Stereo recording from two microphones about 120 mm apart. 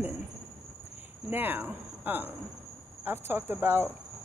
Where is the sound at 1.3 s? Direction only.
15° right (ahead or behind).